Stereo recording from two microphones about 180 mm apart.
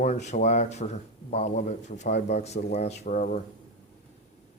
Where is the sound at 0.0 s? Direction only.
40° left (ahead or behind).